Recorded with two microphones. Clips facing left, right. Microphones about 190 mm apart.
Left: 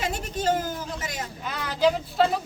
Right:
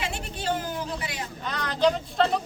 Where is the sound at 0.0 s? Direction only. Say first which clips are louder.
Left 5 dB; 45° left (ahead or behind).